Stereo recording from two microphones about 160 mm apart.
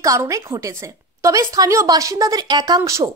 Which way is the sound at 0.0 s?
20° right (ahead or behind).